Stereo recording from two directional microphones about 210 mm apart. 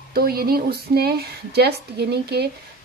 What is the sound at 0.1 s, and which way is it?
Speech, 45° right (ahead or behind).